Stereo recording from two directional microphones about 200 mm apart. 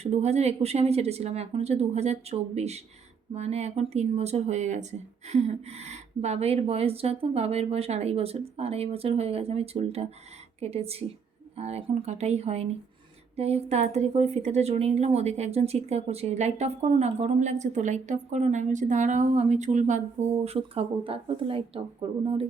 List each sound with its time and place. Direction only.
0.0 s a woman's voice: 35° right (ahead or behind)